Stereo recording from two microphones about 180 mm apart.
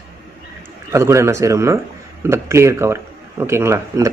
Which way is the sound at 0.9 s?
15° right (ahead or behind).